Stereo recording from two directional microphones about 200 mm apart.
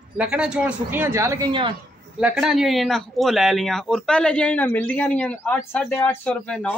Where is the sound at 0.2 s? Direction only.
5° right (ahead or behind); by 1.7 s 20° right (ahead or behind).